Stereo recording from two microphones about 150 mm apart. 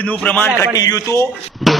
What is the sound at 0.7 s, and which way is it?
Speech, 25° left (ahead or behind).